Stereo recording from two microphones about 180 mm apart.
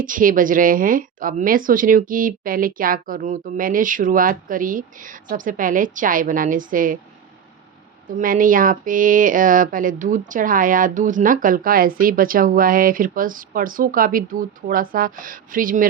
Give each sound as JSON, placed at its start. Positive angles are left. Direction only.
{"t": 0.0, "sound": "speech", "side_deg": -50}
{"t": 8.2, "sound": "speech", "side_deg": -50}